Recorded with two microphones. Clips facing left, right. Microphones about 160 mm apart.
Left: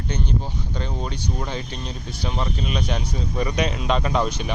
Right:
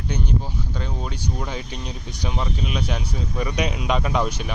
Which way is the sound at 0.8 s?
5° right (ahead or behind).